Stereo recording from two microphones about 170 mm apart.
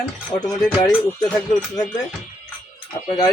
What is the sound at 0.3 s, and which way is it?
Speech, 25° left (ahead or behind).